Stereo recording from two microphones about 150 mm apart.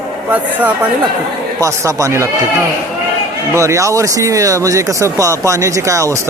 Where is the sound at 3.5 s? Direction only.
20° right (ahead or behind).